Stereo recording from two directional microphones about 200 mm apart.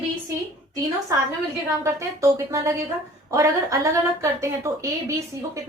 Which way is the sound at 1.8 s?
15° right (ahead or behind).